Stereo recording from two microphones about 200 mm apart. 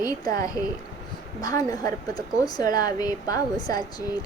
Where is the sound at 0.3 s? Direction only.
20° left (ahead or behind).